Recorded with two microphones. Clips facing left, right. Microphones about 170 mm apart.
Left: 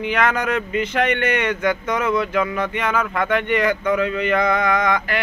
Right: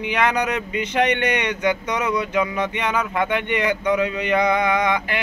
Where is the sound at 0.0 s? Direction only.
15° right (ahead or behind).